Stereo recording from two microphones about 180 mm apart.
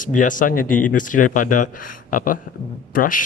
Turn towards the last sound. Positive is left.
turn(degrees=50)  # may be behind; listen again after turning